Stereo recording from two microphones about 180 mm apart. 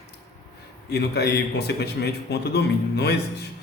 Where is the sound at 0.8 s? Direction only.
65° left (ahead or behind).